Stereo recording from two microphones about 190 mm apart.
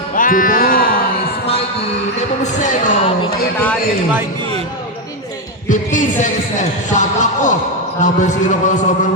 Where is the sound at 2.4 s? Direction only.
40° left (ahead or behind).